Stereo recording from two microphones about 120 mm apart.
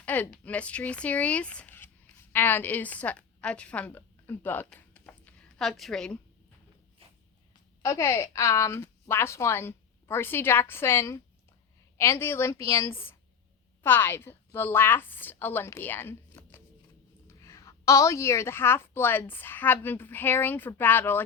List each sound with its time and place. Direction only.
0.0 s speech: 15° left (ahead or behind)
7.8 s a woman's voice: 25° left (ahead or behind)